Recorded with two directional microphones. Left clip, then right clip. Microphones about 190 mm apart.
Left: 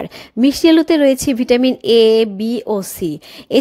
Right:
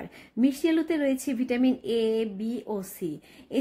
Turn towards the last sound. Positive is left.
turn(degrees=40)  # may be behind; listen again after turning